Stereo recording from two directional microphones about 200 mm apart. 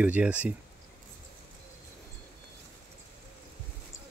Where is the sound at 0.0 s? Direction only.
5° right (ahead or behind).